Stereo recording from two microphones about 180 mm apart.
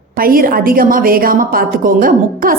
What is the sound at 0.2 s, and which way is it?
A woman's voice, 55° right (ahead or behind).